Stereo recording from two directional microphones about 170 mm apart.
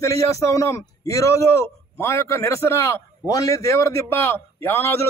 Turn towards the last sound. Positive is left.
turn(degrees=15)  # may be behind; listen again after turning